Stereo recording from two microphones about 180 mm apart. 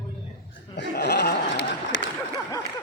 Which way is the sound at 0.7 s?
65° left (ahead or behind).